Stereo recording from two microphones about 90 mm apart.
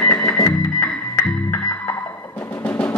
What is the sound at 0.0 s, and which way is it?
Music, 15° left (ahead or behind).